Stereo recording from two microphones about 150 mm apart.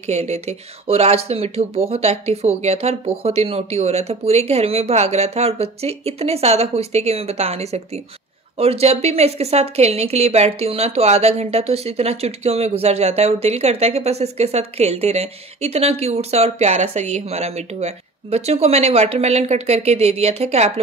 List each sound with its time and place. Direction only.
0.0 s a woman's voice: 45° right (ahead or behind)